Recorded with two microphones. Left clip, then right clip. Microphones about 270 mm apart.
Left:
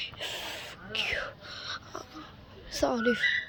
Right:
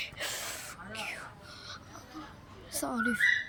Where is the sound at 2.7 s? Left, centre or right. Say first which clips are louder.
Left 5 dB; centre.